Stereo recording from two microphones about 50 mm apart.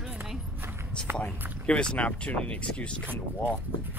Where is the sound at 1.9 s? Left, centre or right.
Left.